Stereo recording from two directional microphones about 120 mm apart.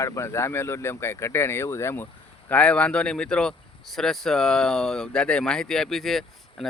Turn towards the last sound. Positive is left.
turn(degrees=0)  # may be behind; listen again after turning